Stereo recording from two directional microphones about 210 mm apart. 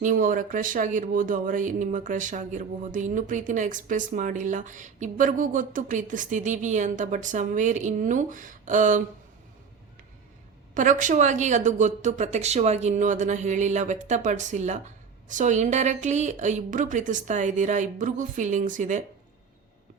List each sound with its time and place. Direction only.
0.0 s speech: 40° right (ahead or behind)
10.8 s speech: 40° right (ahead or behind)